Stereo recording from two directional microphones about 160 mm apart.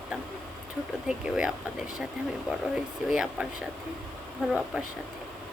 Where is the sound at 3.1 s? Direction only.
5° right (ahead or behind).